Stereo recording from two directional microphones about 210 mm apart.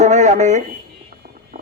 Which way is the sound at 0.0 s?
35° right (ahead or behind).